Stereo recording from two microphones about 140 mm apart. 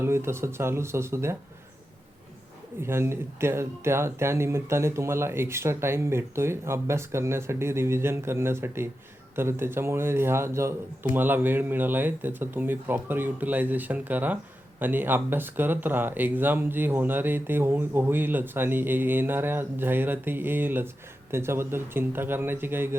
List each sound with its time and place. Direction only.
0.0 s speech: 20° right (ahead or behind)
2.8 s speech: 15° right (ahead or behind)